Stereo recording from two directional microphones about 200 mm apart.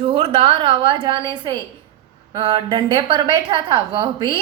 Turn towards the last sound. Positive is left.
turn(degrees=-20)  # may be behind; listen again after turning